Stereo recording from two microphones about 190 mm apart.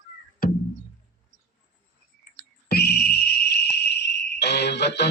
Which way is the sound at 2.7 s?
55° left (ahead or behind).